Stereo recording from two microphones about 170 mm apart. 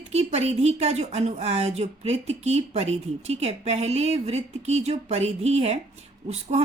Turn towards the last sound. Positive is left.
turn(degrees=-40)  # may be behind; listen again after turning